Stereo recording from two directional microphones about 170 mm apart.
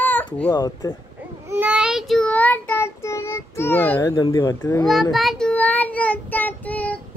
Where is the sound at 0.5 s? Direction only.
25° left (ahead or behind).